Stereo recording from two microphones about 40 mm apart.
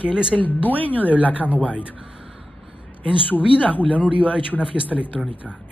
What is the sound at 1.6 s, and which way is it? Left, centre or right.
Speech, left.